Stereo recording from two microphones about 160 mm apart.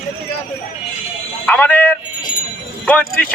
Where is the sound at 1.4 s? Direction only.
10° left (ahead or behind).